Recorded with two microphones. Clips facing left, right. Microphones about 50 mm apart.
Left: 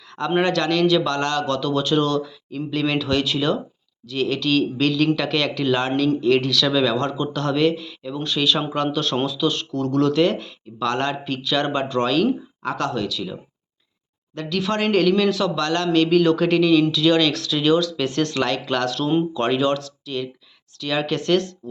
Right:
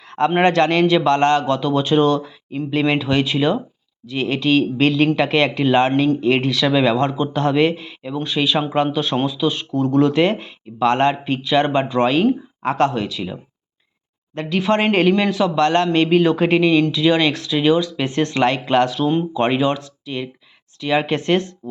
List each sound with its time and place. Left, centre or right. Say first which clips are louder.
0.0 s a sound: right 9 dB; right
0.3 s a man's voice: right 3 dB; right
8.1 s speech: right 2 dB; centre
18.9 s speech: right 1 dB; centre